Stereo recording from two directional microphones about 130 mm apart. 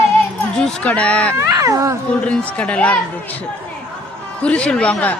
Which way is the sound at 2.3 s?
10° left (ahead or behind).